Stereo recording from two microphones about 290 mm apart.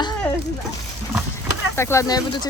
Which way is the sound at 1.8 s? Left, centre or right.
Centre.